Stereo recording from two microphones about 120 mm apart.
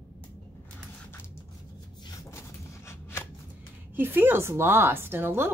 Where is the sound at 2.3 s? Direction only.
25° left (ahead or behind).